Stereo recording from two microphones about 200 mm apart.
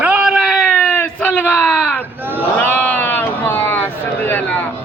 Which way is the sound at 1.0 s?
10° left (ahead or behind).